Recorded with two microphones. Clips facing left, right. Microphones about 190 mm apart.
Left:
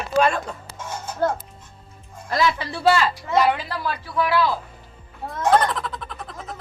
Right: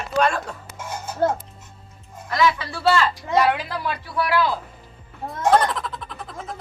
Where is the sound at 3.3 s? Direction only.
Centre (ahead or behind).